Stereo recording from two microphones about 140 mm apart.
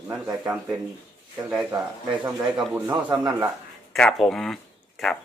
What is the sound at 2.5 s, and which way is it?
Speech, 10° right (ahead or behind).